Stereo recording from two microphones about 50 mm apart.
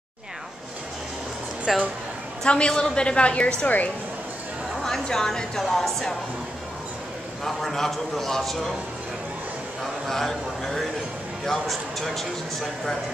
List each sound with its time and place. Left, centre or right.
1.7 s a man's voice: centre
2.4 s a woman's voice: centre
5.0 s speech: centre
7.4 s a man's voice: centre
10.0 s a man's voice: centre